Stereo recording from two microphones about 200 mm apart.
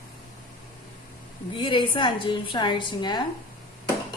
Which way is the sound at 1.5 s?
25° left (ahead or behind).